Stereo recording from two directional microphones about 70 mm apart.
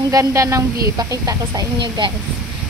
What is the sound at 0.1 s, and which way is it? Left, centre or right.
A woman's voice, right.